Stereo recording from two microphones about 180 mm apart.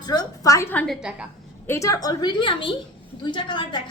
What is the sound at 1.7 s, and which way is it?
A woman's voice, 15° left (ahead or behind).